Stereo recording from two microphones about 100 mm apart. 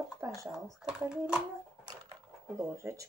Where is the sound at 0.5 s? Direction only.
5° right (ahead or behind).